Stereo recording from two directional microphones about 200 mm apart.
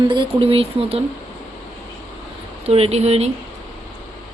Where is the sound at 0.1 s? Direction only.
25° right (ahead or behind).